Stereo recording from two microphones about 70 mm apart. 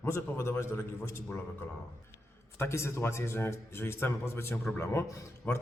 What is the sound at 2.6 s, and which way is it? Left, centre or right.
A man's voice, left.